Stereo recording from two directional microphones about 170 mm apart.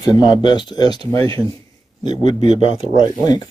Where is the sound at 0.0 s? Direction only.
25° left (ahead or behind).